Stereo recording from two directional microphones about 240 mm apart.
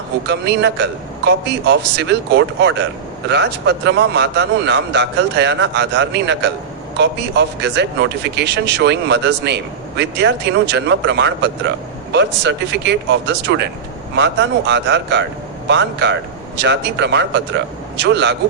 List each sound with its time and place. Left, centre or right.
0.3 s a man's voice: right